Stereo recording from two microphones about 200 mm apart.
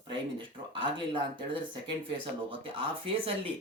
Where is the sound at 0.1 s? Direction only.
25° right (ahead or behind).